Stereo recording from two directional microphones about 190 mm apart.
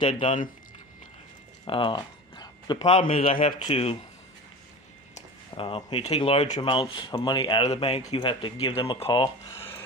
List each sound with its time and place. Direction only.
0.0 s speech: 30° left (ahead or behind)
1.7 s speech: 25° left (ahead or behind)
3.2 s speech: 45° left (ahead or behind)
3.6 s speech: 30° left (ahead or behind)
5.1 s speech: 30° left (ahead or behind)